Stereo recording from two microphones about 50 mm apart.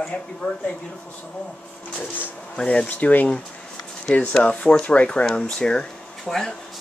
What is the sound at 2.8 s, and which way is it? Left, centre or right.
Speech, left.